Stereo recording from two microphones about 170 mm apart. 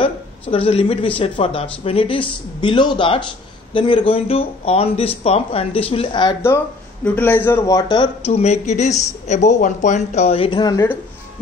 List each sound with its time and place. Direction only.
0.0 s a woman's voice: 35° left (ahead or behind)
7.2 s a man's voice: 10° left (ahead or behind)
8.3 s speech: 40° left (ahead or behind); by 10.9 s 25° left (ahead or behind)